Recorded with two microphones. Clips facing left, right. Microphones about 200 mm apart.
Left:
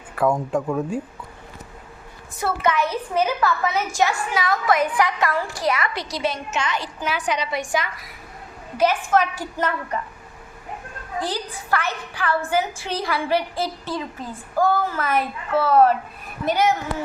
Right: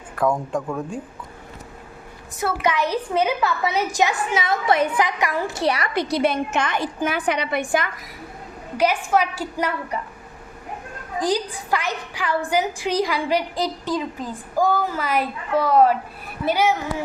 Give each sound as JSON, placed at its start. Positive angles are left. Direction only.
{"t": 0.2, "sound": "speech", "side_deg": 5}
{"t": 2.6, "sound": "a woman's voice", "side_deg": -15}
{"t": 5.0, "sound": "a woman's voice", "side_deg": -15}
{"t": 5.6, "sound": "a woman's voice", "side_deg": -35}
{"t": 5.9, "sound": "a woman's voice", "side_deg": -55}
{"t": 8.8, "sound": "a woman's voice", "side_deg": -10}
{"t": 11.2, "sound": "a woman's voice", "side_deg": -15}